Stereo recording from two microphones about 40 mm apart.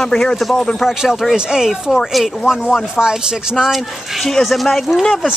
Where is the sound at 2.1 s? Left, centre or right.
Centre.